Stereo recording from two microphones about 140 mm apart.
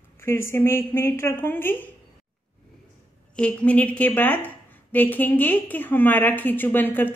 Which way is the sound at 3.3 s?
5° left (ahead or behind).